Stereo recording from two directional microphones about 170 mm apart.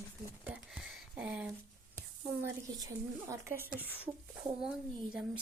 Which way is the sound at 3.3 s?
15° right (ahead or behind).